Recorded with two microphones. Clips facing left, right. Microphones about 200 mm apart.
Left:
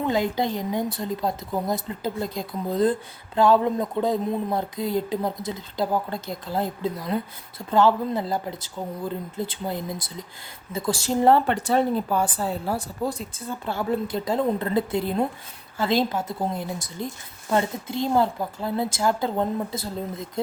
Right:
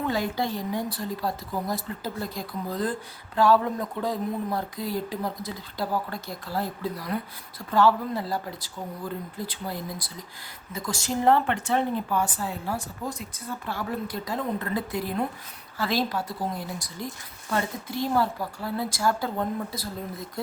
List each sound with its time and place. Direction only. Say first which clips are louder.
0.0 s speech: left 4 dB; 20° left (ahead or behind)